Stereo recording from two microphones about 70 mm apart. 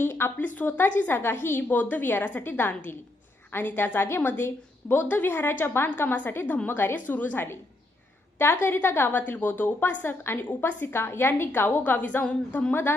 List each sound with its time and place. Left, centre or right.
0.0 s a woman's voice: left